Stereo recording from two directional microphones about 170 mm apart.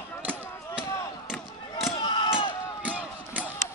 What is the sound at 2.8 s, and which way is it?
Battle cry, 10° right (ahead or behind).